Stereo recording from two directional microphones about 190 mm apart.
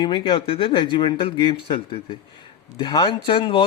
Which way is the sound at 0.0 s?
25° left (ahead or behind).